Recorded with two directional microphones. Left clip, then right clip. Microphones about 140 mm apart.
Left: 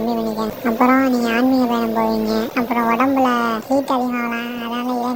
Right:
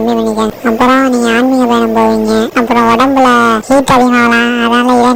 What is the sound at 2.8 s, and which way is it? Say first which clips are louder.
Speech: right 8 dB; 50° right (ahead or behind).